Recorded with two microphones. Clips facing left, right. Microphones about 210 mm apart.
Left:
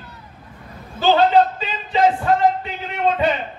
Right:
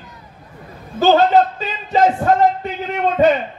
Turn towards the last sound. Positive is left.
turn(degrees=-45)  # may be behind; listen again after turning